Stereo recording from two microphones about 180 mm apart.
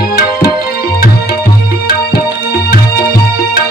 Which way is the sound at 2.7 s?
55° left (ahead or behind).